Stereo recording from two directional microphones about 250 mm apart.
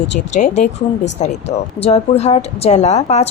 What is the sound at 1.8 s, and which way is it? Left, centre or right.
A woman's voice, left.